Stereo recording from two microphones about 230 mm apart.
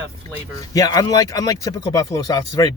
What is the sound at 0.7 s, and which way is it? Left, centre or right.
Speech, centre.